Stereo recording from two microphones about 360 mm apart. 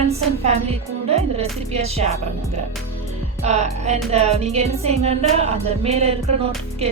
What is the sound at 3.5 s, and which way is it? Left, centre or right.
Music, centre.